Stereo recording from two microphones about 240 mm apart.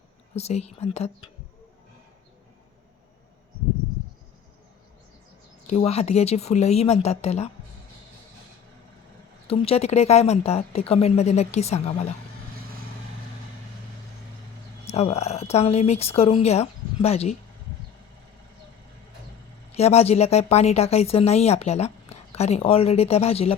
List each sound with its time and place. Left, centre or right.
0.3 s a woman's voice: left
5.6 s a woman's voice: left
9.5 s a woman's voice: left
14.8 s a woman's voice: left
19.7 s a woman's voice: left